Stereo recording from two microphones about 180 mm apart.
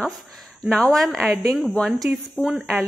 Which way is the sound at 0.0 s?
Centre (ahead or behind).